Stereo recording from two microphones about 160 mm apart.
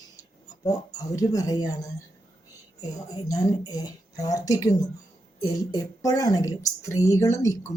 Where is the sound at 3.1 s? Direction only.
25° left (ahead or behind).